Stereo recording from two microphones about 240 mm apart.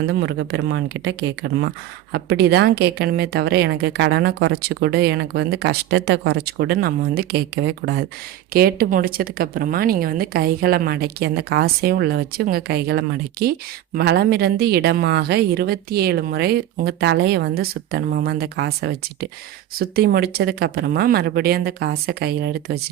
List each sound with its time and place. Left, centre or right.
0.1 s a woman's voice: right